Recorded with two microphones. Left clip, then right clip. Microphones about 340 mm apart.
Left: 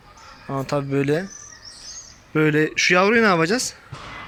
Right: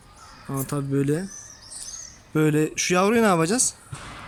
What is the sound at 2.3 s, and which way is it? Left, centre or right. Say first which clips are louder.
Speech: left 3 dB; centre.